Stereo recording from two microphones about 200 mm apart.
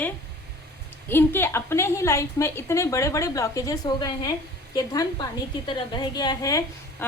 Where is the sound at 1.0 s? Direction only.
10° left (ahead or behind).